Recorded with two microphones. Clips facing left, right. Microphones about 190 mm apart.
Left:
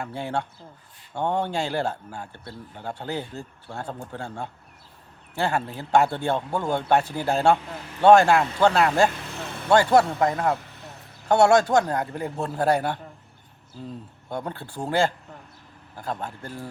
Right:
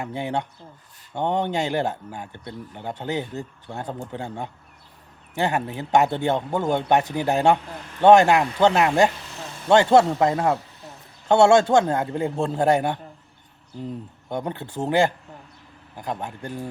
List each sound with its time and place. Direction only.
0.0 s a man's voice: 20° right (ahead or behind)